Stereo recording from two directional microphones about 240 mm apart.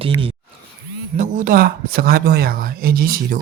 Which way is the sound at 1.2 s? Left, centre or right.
Right.